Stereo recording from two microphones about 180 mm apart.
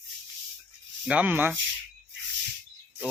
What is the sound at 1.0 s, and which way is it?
Speech, 10° right (ahead or behind).